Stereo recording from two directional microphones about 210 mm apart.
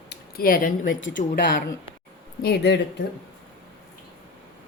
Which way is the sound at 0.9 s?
65° left (ahead or behind).